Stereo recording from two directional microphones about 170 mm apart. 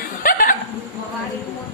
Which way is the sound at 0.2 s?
55° left (ahead or behind).